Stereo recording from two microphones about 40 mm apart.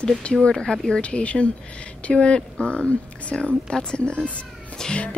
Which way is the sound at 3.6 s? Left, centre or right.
Left.